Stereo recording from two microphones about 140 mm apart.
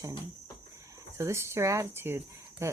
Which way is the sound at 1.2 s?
20° right (ahead or behind).